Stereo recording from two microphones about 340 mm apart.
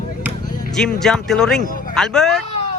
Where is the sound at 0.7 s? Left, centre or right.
Centre.